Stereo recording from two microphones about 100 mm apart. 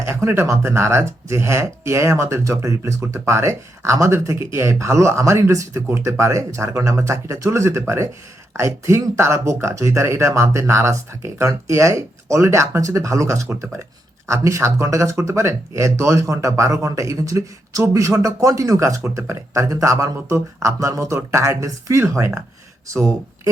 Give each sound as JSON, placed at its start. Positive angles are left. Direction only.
{"t": 0.1, "sound": "speech", "side_deg": -25}